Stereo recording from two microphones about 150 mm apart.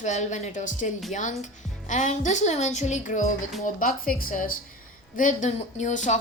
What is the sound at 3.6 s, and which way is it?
Speech, 70° left (ahead or behind).